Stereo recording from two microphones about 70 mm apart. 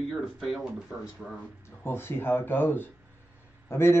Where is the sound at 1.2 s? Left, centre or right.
Centre.